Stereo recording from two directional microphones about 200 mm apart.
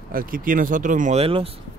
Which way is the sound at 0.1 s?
45° right (ahead or behind).